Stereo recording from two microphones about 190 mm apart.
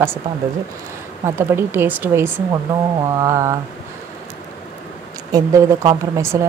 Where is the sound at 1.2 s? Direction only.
10° right (ahead or behind).